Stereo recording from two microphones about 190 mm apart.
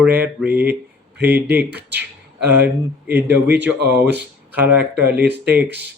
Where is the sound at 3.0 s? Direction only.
10° right (ahead or behind).